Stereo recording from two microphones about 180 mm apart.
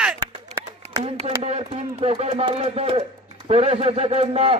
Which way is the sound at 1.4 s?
35° right (ahead or behind).